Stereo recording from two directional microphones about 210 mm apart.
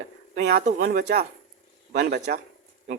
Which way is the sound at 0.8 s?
50° right (ahead or behind).